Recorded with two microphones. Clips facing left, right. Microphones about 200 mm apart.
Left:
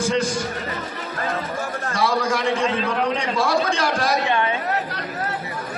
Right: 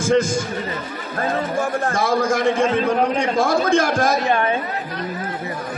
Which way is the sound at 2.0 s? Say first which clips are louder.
Right 1 dB; 45° right (ahead or behind).